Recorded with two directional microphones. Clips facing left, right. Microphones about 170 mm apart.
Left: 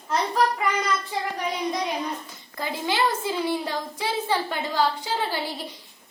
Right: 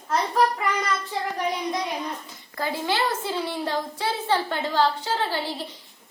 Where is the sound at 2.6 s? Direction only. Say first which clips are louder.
Even; 15° left (ahead or behind).